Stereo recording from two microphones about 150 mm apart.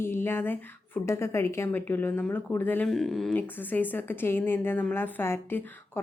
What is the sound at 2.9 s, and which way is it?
Speech, centre (ahead or behind).